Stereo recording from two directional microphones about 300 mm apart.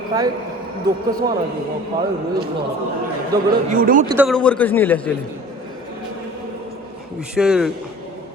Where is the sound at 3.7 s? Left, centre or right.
Right.